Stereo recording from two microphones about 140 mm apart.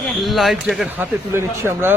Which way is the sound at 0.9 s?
15° right (ahead or behind).